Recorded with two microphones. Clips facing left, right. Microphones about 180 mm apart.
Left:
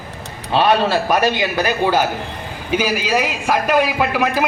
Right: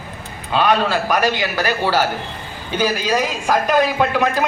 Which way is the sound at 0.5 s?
30° left (ahead or behind).